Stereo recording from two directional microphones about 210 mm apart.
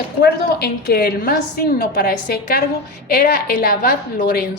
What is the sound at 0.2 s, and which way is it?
A woman's voice, 50° left (ahead or behind).